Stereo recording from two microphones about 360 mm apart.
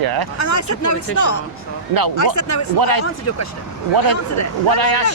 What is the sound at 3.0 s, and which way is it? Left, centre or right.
Speech, left.